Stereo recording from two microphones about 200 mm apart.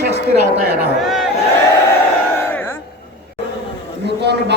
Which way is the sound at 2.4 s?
10° left (ahead or behind).